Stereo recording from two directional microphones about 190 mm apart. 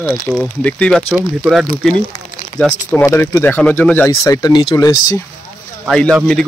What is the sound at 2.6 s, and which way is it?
Speech, 10° left (ahead or behind).